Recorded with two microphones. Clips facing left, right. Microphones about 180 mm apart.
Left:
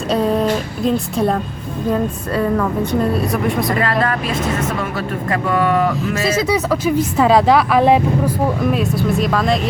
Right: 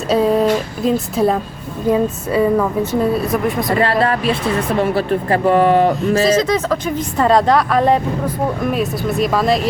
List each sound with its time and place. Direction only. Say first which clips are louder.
0.1 s a sound: right 3 dB; centre (ahead or behind)
0.9 s a woman's voice: right 2 dB; centre (ahead or behind)
3.7 s speech: right 2 dB; 30° right (ahead or behind)
6.3 s a woman's voice: right 1 dB; 10° left (ahead or behind)